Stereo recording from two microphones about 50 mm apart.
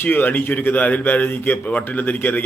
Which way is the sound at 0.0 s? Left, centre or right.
Left.